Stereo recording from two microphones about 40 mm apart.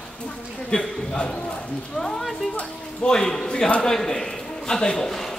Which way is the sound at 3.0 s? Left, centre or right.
Centre.